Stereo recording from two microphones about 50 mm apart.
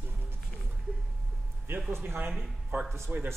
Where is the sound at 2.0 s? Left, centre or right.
Right.